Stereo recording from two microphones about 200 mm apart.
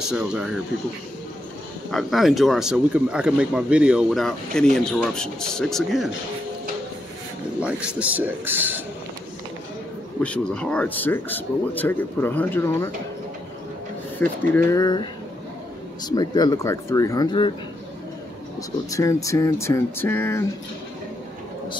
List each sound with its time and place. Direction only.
0.0 s speech: 5° right (ahead or behind)
1.9 s speech: centre (ahead or behind)
7.6 s speech: 5° right (ahead or behind)
10.2 s speech: 5° left (ahead or behind)
14.2 s speech: 10° left (ahead or behind)
18.6 s speech: 15° left (ahead or behind)